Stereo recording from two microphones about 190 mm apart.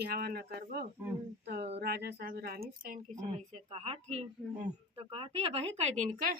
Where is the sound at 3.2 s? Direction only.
35° right (ahead or behind).